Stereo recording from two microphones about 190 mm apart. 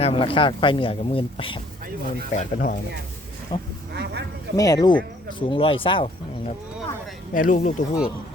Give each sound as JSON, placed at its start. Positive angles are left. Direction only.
{"t": 0.0, "sound": "speech", "side_deg": 30}
{"t": 2.3, "sound": "speech", "side_deg": 45}
{"t": 3.5, "sound": "speech", "side_deg": 20}
{"t": 3.9, "sound": "a sound", "side_deg": -60}
{"t": 4.5, "sound": "speech", "side_deg": 20}
{"t": 7.3, "sound": "speech", "side_deg": 45}